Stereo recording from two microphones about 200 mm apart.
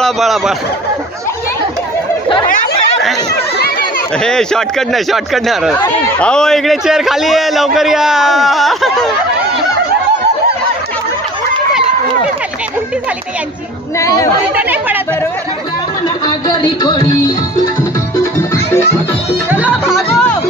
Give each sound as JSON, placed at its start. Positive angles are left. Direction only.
{"t": 0.0, "sound": "speech", "side_deg": 0}
{"t": 4.2, "sound": "a man's voice", "side_deg": 5}
{"t": 13.9, "sound": "speech", "side_deg": 15}
{"t": 14.5, "sound": "speech", "side_deg": -10}
{"t": 16.3, "sound": "music", "side_deg": 20}
{"t": 19.5, "sound": "music", "side_deg": -10}
{"t": 20.1, "sound": "music", "side_deg": 5}